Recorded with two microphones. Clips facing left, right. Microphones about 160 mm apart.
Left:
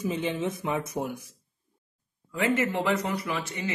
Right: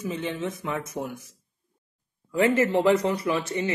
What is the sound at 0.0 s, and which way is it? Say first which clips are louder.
Speech: left 1 dB; 20° left (ahead or behind).